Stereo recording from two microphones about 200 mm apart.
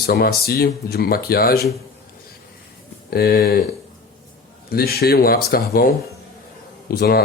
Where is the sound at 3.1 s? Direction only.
50° left (ahead or behind).